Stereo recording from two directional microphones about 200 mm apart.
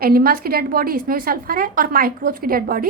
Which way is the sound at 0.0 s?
50° right (ahead or behind).